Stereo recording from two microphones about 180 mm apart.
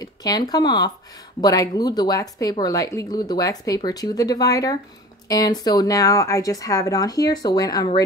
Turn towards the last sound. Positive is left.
turn(degrees=20)  # may be behind; listen again after turning